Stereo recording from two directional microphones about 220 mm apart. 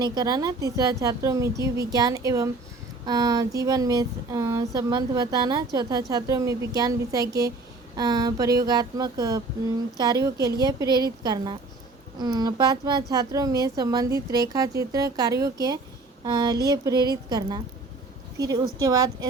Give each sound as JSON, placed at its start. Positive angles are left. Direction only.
{"t": 0.0, "sound": "a woman's voice", "side_deg": -20}